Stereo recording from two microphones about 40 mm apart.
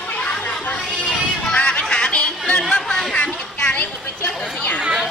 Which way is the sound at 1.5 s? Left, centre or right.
Left.